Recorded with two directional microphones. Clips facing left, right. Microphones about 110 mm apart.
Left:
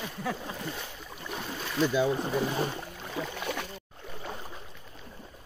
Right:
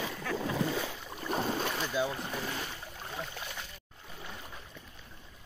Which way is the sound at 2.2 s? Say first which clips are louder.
Left 8 dB; 35° left (ahead or behind).